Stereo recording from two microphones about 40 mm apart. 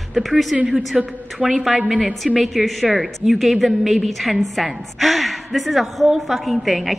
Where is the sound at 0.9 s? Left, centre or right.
Centre.